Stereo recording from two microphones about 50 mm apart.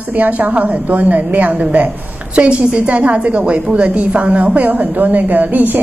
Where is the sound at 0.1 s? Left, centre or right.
Right.